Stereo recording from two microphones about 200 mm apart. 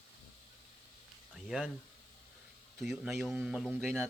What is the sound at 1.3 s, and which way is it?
Speech, centre (ahead or behind).